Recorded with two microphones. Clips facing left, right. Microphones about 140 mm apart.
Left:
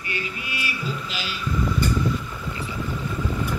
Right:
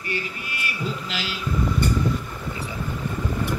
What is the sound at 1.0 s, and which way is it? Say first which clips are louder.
Speech: right 2 dB; 85° right.